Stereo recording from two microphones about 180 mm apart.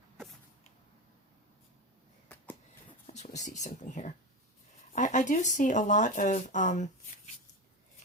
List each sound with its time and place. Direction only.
3.2 s speech: 40° left (ahead or behind)